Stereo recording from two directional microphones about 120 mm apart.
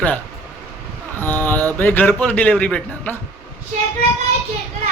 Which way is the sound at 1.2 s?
15° left (ahead or behind).